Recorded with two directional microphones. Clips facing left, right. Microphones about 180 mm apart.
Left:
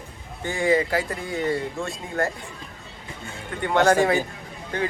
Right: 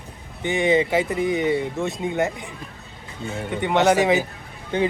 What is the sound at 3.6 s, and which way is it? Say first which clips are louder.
Speech: right 1 dB; 20° right (ahead or behind).